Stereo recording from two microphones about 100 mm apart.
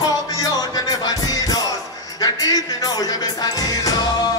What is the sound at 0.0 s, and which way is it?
Music, 40° left (ahead or behind).